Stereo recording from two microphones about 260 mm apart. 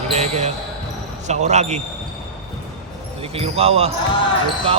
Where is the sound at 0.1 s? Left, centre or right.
Right.